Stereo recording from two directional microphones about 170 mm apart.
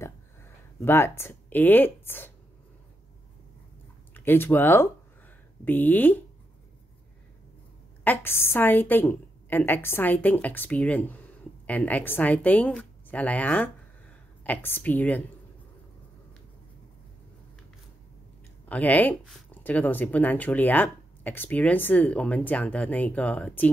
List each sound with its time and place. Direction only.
0.7 s speech: 15° left (ahead or behind)
4.1 s speech: 10° left (ahead or behind)
8.0 s speech: 10° left (ahead or behind)
18.7 s speech: 10° left (ahead or behind)